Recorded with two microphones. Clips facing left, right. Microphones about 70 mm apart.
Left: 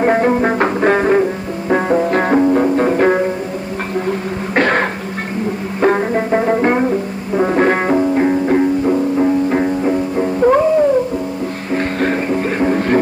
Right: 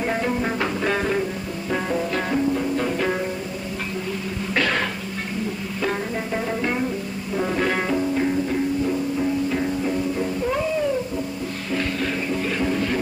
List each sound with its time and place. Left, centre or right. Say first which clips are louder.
0.0 s music: left 10 dB; left
4.6 s cough: left 8 dB; left
5.8 s music: left 12 dB; left